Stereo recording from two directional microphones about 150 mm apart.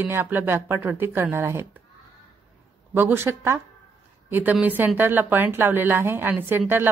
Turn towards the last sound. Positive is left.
turn(degrees=-15)  # may be behind; listen again after turning